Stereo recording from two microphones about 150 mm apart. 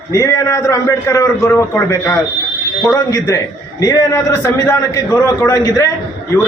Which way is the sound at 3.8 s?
20° left (ahead or behind).